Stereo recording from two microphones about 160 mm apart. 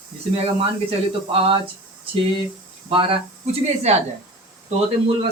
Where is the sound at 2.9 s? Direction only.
35° right (ahead or behind).